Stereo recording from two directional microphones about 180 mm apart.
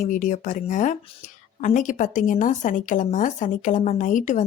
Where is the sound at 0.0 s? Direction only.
45° left (ahead or behind).